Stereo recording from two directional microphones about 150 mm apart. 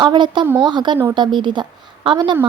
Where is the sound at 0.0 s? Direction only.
30° right (ahead or behind).